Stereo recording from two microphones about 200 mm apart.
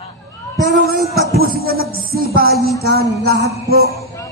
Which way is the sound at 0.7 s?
50° right (ahead or behind).